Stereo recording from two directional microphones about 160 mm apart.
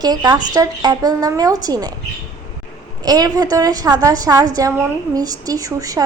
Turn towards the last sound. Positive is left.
turn(degrees=-20)  # may be behind; listen again after turning